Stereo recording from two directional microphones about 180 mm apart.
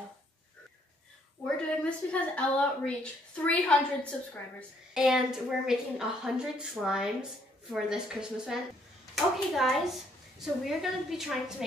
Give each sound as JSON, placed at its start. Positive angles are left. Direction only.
{"t": 1.9, "sound": "a woman's voice", "side_deg": 5}